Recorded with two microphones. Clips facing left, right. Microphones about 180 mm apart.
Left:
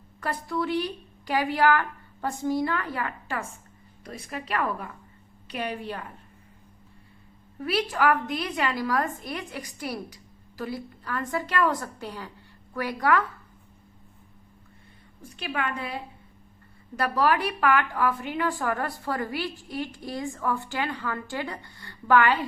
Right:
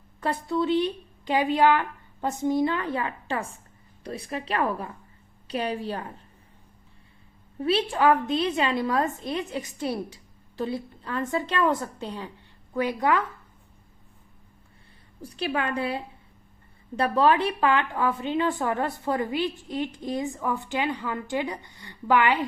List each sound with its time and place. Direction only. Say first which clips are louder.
0.2 s a woman's voice: right 3 dB; 25° right (ahead or behind)
7.6 s a woman's voice: right 3 dB; 25° right (ahead or behind)
15.2 s a woman's voice: right 3 dB; 35° right (ahead or behind)
17.0 s a woman's voice: right 3 dB; 25° right (ahead or behind)